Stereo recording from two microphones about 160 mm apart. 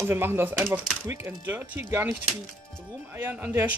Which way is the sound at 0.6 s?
5° right (ahead or behind).